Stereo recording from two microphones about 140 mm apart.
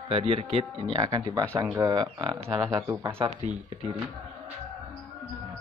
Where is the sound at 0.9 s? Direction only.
30° right (ahead or behind).